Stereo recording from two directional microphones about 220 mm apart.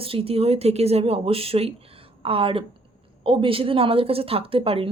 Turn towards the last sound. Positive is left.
turn(degrees=-25)  # may be behind; listen again after turning